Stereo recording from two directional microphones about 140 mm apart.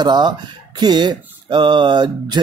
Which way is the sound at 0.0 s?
30° right (ahead or behind).